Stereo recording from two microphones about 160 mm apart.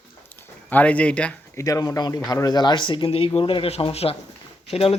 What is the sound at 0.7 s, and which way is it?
Speech, 10° left (ahead or behind).